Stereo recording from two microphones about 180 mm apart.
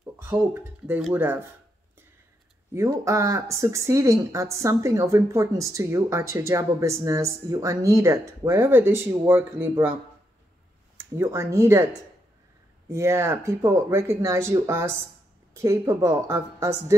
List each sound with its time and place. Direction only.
0.0 s speech: 10° right (ahead or behind)
2.7 s speech: 15° right (ahead or behind)
11.0 s speech: 15° right (ahead or behind)
12.9 s speech: 15° right (ahead or behind)